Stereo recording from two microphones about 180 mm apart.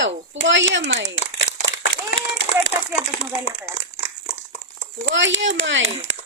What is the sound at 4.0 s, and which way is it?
Dog, 40° left (ahead or behind).